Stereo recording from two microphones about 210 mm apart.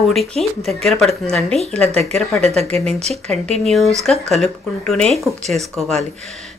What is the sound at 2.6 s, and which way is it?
Speech, 30° right (ahead or behind).